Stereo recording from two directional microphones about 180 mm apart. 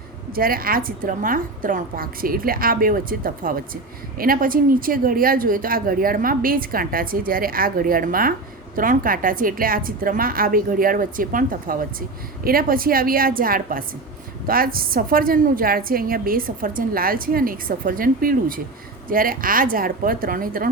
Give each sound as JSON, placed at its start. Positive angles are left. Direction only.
{"t": 0.3, "sound": "a woman's voice", "side_deg": -55}